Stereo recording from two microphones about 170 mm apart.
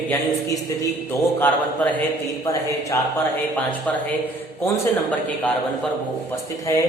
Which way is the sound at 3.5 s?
10° left (ahead or behind).